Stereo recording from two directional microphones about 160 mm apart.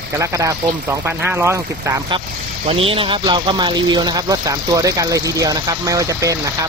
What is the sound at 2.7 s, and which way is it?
Speech, 35° right (ahead or behind).